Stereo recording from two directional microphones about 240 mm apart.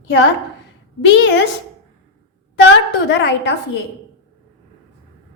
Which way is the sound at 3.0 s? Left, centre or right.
Left.